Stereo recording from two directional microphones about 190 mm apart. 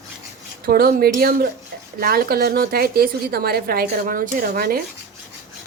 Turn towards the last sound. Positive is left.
turn(degrees=-50)  # may be behind; listen again after turning